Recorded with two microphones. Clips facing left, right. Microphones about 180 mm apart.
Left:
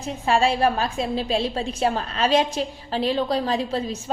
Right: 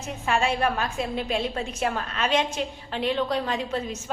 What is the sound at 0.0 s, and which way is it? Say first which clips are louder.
A woman's voice: left 5 dB; 30° left (ahead or behind).